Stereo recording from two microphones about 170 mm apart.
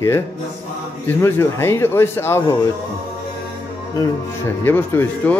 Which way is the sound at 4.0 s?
15° left (ahead or behind).